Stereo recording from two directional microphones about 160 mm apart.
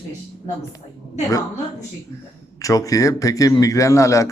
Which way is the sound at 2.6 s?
20° left (ahead or behind).